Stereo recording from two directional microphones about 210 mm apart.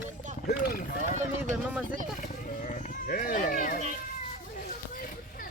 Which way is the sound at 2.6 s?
40° left (ahead or behind).